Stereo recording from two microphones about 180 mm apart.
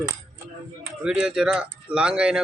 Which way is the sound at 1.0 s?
5° right (ahead or behind).